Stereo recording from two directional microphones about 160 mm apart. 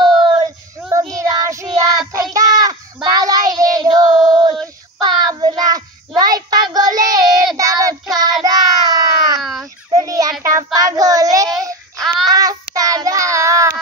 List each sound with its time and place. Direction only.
0.1 s child singing: centre (ahead or behind)
0.4 s child singing: 20° right (ahead or behind)
4.1 s female singing: centre (ahead or behind)
4.9 s child singing: 25° right (ahead or behind)
9.4 s baby cry: centre (ahead or behind)
9.8 s a sound: 20° right (ahead or behind)
10.4 s child singing: 20° right (ahead or behind)